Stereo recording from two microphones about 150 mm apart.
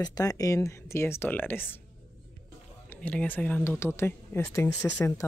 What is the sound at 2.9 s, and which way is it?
Speech, 10° left (ahead or behind).